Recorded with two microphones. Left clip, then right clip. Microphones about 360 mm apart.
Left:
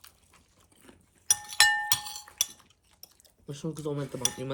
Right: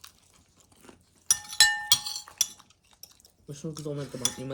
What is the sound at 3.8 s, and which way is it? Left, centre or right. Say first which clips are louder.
Cutlery: even; left.